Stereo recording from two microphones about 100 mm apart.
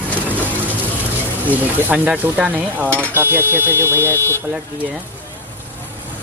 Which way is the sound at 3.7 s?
20° left (ahead or behind).